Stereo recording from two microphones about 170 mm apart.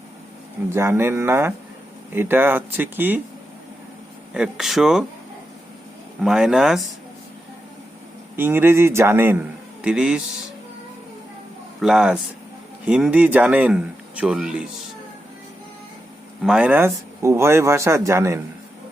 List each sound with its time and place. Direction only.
0.7 s speech: 15° right (ahead or behind)
4.4 s speech: centre (ahead or behind)
6.2 s speech: 5° right (ahead or behind)
8.4 s speech: 10° right (ahead or behind)
11.8 s speech: 5° right (ahead or behind)
16.4 s speech: 5° right (ahead or behind)